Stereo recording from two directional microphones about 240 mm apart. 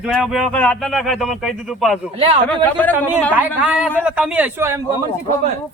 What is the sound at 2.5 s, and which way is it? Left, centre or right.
Speech, centre.